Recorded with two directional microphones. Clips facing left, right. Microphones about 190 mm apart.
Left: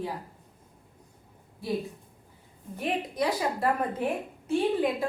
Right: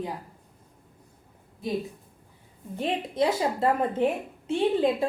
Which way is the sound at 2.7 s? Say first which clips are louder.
Right 3 dB; 25° right (ahead or behind).